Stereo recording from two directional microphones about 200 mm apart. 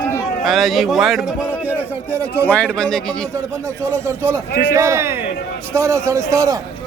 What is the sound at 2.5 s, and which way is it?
Speech, 5° left (ahead or behind).